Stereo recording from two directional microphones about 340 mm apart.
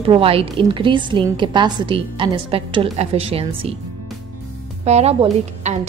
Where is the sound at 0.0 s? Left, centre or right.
Centre.